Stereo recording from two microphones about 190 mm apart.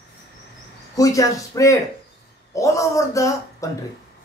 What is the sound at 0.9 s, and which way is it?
Speech, 20° left (ahead or behind).